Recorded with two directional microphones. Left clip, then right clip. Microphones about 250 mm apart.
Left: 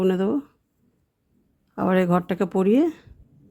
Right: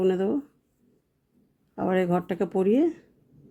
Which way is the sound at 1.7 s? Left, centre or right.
Centre.